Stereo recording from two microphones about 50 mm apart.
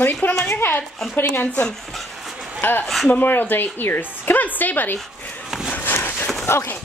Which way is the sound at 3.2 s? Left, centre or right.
Left.